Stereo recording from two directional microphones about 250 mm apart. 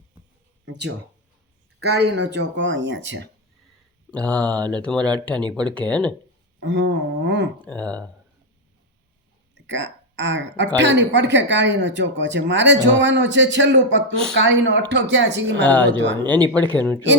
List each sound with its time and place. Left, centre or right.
0.6 s speech: right
4.1 s speech: centre
6.6 s speech: right
7.6 s speech: centre
9.6 s speech: right
15.6 s speech: centre